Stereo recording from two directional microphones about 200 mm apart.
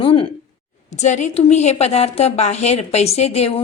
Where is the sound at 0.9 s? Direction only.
35° left (ahead or behind).